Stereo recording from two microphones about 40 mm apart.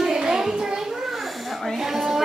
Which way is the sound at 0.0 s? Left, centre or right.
Centre.